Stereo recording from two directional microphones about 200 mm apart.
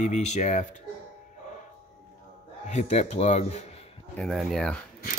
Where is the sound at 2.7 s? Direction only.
35° left (ahead or behind).